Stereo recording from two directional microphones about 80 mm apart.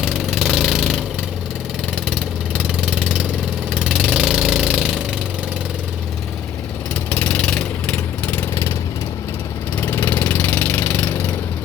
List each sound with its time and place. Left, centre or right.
0.0 s a sound: centre
2.0 s engine: centre
7.1 s vehicle: centre
9.8 s engine: left